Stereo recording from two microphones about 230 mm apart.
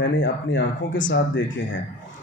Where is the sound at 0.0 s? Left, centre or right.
Left.